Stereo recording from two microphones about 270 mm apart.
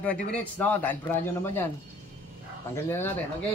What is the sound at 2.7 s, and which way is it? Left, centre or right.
Speech, centre.